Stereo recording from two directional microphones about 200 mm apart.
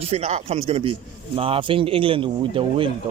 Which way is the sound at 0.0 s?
30° right (ahead or behind).